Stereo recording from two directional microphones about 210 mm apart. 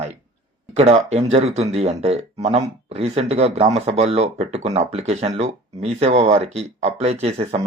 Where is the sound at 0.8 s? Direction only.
30° right (ahead or behind).